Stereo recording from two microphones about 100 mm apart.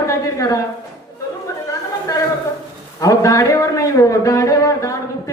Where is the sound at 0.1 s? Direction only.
35° left (ahead or behind).